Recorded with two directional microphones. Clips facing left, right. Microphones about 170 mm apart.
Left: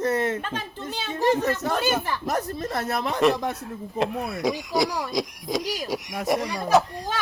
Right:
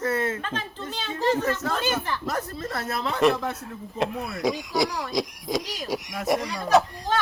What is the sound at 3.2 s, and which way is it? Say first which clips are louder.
A child's voice: even; centre (ahead or behind).